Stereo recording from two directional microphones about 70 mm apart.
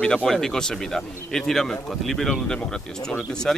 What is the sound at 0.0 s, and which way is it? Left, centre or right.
Speech, centre.